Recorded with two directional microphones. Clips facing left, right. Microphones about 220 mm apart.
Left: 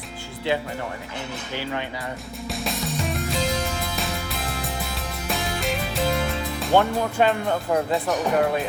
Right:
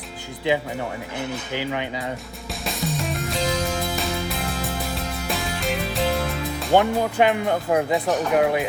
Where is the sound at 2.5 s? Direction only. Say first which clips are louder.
Right 1 dB; centre (ahead or behind).